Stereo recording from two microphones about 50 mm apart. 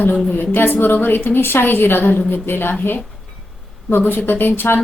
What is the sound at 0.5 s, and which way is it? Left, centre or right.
A woman's voice, left.